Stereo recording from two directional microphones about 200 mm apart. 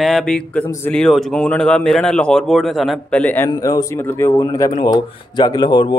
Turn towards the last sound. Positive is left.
turn(degrees=25)  # may be behind; listen again after turning